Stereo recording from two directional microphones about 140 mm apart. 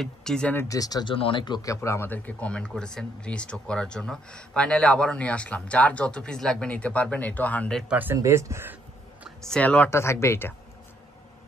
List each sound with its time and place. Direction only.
0.0 s speech: 5° left (ahead or behind)
0.7 s speech: 25° left (ahead or behind)
1.1 s speech: 40° left (ahead or behind); by 7.8 s 10° left (ahead or behind)
7.9 s speech: 15° right (ahead or behind)
9.5 s speech: 10° left (ahead or behind)